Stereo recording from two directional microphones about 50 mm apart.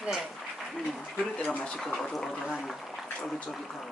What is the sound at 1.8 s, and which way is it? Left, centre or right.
Speech, centre.